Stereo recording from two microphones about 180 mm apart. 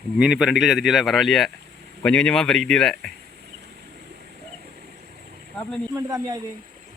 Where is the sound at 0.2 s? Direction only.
5° right (ahead or behind).